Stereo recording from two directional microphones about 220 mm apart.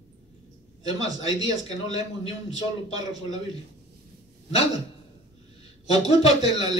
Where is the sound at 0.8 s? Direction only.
20° right (ahead or behind).